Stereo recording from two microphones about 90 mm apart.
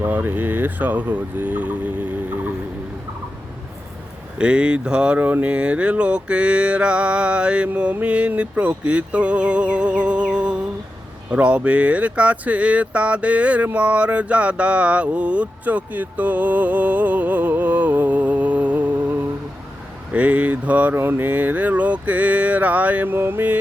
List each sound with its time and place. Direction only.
0.0 s speech: 20° right (ahead or behind)
4.4 s speech: 10° right (ahead or behind)
20.1 s speech: 15° right (ahead or behind)